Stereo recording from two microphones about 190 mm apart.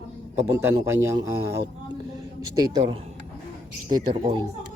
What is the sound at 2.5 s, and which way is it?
Speech, 20° right (ahead or behind).